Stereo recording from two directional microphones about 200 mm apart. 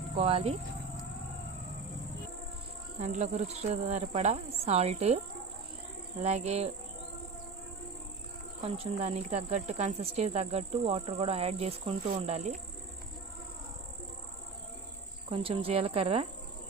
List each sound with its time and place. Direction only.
0.2 s speech: 30° right (ahead or behind)
3.0 s speech: 35° right (ahead or behind)
8.6 s speech: 30° right (ahead or behind)
15.3 s speech: 30° right (ahead or behind)